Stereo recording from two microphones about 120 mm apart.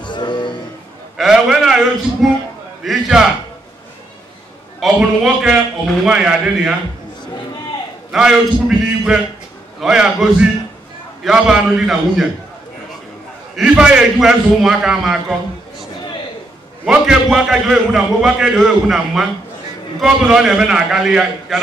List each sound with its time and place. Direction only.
0.0 s music: 40° left (ahead or behind)
1.1 s a sound: 5° right (ahead or behind)
2.8 s a man's voice: 5° right (ahead or behind)
4.7 s a man's voice: centre (ahead or behind)
8.1 s a man's voice: 5° right (ahead or behind)
13.6 s a man's voice: 5° right (ahead or behind)
16.8 s a man's voice: 5° right (ahead or behind)